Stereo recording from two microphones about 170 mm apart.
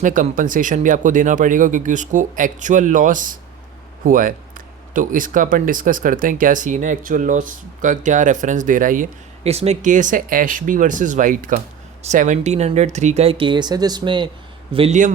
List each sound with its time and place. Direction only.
0.0 s speech: 50° right (ahead or behind)
9.4 s speech: 40° right (ahead or behind)